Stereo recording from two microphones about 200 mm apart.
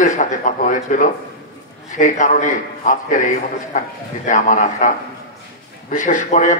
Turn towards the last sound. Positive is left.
turn(degrees=35)  # may be behind; listen again after turning